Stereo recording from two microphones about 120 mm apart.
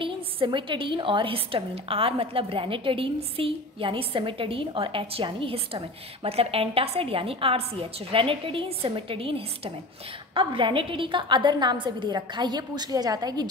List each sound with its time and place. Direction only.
0.0 s a woman's voice: 45° right (ahead or behind)